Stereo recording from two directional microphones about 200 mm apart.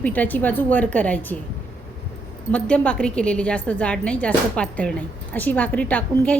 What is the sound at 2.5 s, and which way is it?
A woman's voice, 5° left (ahead or behind).